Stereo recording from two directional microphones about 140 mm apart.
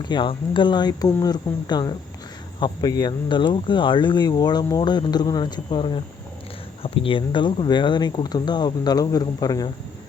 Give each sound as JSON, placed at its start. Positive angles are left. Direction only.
{"t": 0.0, "sound": "speech", "side_deg": 35}